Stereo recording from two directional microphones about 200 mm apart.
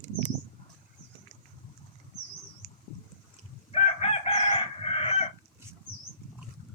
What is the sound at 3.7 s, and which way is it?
Chicken, 30° left (ahead or behind).